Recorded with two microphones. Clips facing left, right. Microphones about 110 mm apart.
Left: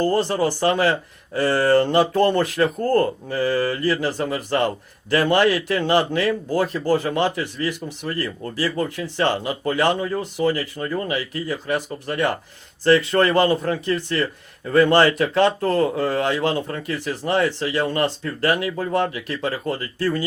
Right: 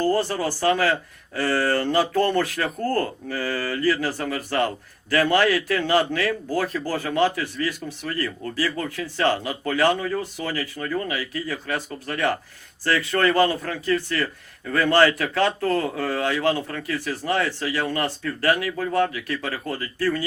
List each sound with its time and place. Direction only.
0.1 s speech: 20° left (ahead or behind)